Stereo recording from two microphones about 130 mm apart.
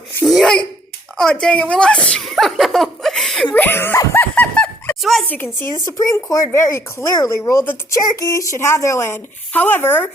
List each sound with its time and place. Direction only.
0.3 s cough: centre (ahead or behind)
1.2 s speech: 5° left (ahead or behind)
3.5 s a sound: 15° left (ahead or behind)
5.3 s speech: 15° left (ahead or behind)
5.7 s speech: 25° left (ahead or behind)